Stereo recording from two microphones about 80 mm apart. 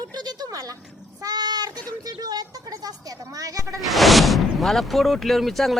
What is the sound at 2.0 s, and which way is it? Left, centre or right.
A woman's voice, right.